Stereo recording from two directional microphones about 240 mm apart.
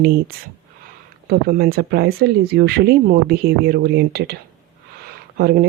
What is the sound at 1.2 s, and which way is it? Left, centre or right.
Speech, right.